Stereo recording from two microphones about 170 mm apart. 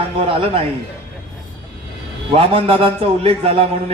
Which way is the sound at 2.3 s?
35° right (ahead or behind).